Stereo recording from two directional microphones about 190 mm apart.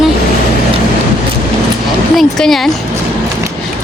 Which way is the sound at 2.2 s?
Centre (ahead or behind).